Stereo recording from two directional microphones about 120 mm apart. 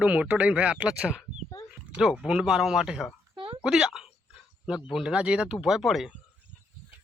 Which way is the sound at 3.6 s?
5° right (ahead or behind).